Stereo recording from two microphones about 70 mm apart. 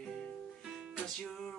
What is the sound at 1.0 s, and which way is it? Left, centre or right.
Music, centre.